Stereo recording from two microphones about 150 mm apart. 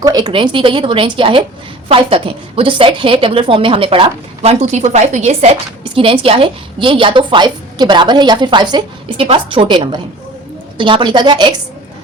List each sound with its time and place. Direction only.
0.0 s a woman's voice: 25° right (ahead or behind)
4.6 s a woman's voice: 50° right (ahead or behind); by 11.5 s 30° right (ahead or behind)